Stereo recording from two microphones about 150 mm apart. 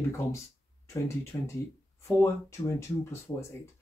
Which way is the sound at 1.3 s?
15° left (ahead or behind).